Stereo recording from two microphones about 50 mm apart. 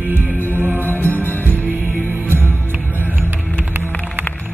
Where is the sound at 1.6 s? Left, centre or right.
Right.